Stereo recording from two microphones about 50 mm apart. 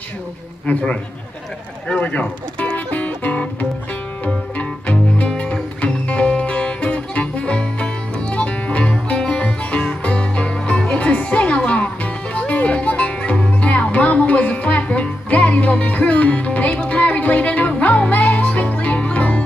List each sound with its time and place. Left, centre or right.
0.7 s a man's voice: left
2.0 s music: left